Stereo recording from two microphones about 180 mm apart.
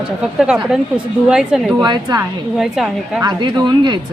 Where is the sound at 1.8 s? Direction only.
25° right (ahead or behind).